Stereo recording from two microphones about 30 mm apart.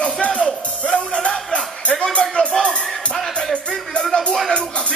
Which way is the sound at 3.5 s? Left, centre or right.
Left.